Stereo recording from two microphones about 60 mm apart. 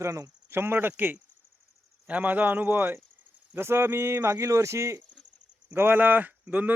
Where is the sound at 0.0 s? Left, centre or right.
Right.